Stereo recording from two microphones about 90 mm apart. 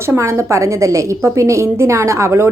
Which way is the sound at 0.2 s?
35° right (ahead or behind).